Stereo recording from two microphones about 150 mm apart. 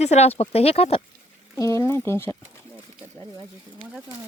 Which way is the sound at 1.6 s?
20° left (ahead or behind).